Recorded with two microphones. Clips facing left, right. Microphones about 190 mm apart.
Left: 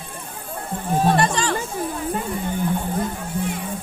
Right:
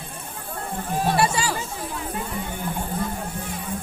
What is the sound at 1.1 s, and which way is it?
Chatter, 5° right (ahead or behind).